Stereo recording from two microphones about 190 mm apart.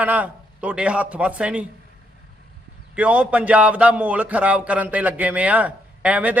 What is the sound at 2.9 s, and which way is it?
A man's voice, 5° right (ahead or behind).